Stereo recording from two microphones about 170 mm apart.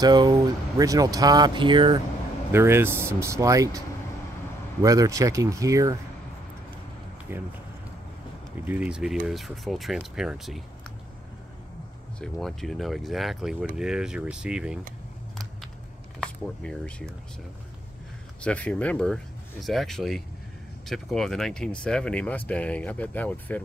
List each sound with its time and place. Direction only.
0.0 s speech: 25° right (ahead or behind)
2.5 s speech: 15° right (ahead or behind)
4.8 s speech: 20° right (ahead or behind)
7.3 s speech: 10° right (ahead or behind)
8.6 s speech: 5° right (ahead or behind)
12.2 s speech: centre (ahead or behind)
16.2 s speech: 5° left (ahead or behind)
18.4 s speech: 5° left (ahead or behind)